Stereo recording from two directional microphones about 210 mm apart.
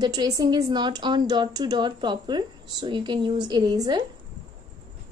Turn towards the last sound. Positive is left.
turn(degrees=-20)  # may be behind; listen again after turning